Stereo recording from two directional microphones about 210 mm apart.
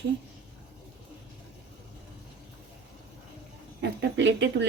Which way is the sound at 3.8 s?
55° right (ahead or behind).